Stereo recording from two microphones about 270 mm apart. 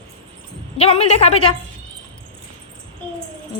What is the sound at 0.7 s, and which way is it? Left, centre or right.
Speech, left.